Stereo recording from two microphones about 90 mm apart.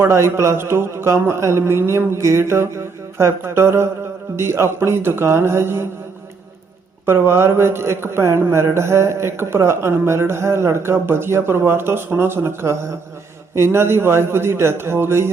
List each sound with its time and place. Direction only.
0.0 s a man's voice: 30° right (ahead or behind)
7.0 s a man's voice: 25° right (ahead or behind)